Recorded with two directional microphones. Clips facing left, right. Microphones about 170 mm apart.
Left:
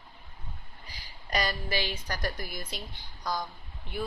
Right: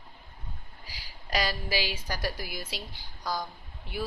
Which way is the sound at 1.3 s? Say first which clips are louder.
Right 1 dB; 5° right (ahead or behind).